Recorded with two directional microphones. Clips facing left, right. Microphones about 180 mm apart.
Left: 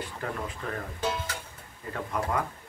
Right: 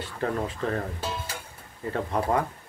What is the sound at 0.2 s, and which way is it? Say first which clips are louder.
Speech: right 9 dB; 35° right (ahead or behind).